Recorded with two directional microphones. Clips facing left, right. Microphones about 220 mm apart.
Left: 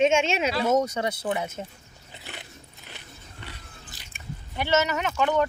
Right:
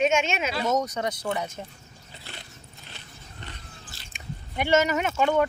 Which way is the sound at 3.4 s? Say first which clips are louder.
Right 1 dB; 10° left (ahead or behind).